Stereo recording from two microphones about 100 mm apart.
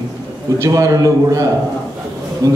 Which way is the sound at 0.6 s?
35° right (ahead or behind).